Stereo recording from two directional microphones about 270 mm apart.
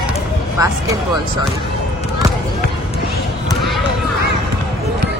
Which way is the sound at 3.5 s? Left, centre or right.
Centre.